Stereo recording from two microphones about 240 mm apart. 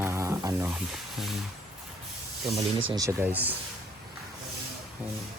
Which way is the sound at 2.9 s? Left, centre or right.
Centre.